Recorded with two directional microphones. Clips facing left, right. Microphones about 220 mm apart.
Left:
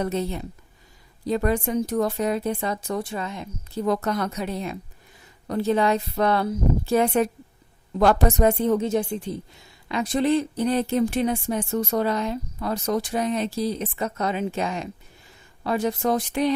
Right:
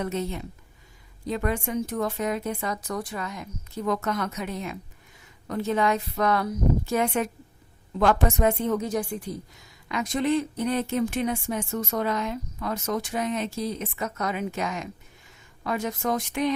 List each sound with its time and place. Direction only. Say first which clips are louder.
0.0 s a woman's voice: left 3 dB; 35° left (ahead or behind)